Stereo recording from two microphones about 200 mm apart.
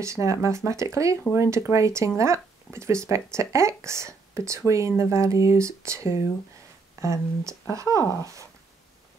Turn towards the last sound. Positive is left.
turn(degrees=-15)  # may be behind; listen again after turning